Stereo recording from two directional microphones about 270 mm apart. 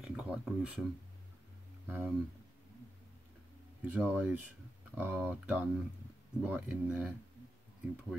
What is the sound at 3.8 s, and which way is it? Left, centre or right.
Speech, centre.